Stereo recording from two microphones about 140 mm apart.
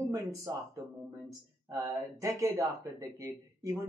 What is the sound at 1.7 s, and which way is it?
Speech, 20° right (ahead or behind).